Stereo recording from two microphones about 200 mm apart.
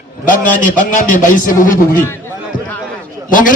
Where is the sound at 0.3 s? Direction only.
40° left (ahead or behind).